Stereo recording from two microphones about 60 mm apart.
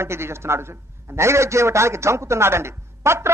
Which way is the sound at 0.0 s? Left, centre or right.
Right.